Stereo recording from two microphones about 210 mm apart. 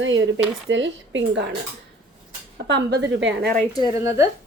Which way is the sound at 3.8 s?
15° right (ahead or behind).